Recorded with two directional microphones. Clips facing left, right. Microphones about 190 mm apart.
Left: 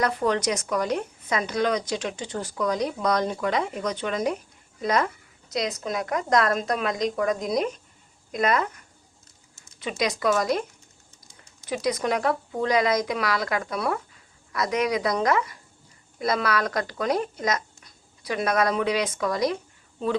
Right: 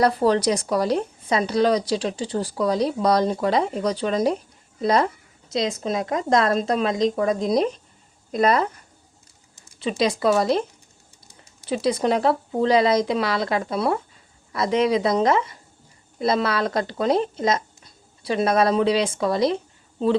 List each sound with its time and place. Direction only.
0.0 s a woman's voice: 35° right (ahead or behind)
10.0 s a woman's voice: 30° right (ahead or behind)
11.6 s a woman's voice: 30° right (ahead or behind)